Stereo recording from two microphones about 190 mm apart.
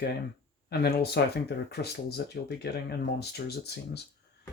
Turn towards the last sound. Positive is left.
turn(degrees=60)  # may be behind; listen again after turning